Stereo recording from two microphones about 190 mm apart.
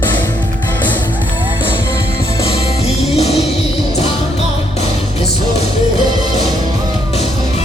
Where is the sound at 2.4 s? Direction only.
30° left (ahead or behind).